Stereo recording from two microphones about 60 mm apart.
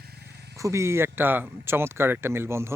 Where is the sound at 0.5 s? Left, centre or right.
Right.